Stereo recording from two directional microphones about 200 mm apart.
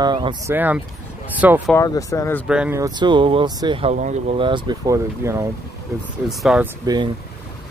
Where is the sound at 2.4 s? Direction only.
5° right (ahead or behind).